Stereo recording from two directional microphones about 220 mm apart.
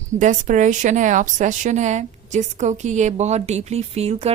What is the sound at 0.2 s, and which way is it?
A woman's voice, 35° right (ahead or behind).